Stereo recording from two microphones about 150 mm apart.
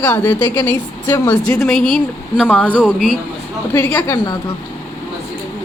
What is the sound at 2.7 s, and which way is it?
Speech, 10° right (ahead or behind).